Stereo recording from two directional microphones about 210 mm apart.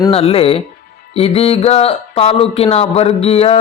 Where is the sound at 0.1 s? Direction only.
25° left (ahead or behind).